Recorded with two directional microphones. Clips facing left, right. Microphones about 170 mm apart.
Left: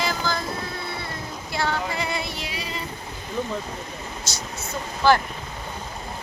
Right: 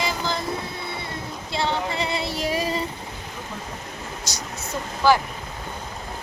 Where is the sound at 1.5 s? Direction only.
25° right (ahead or behind); by 2.8 s 40° right (ahead or behind).